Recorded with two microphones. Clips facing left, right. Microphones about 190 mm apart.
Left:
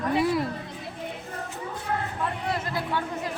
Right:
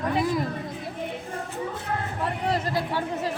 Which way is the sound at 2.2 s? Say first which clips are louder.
Right 3 dB; 30° right (ahead or behind).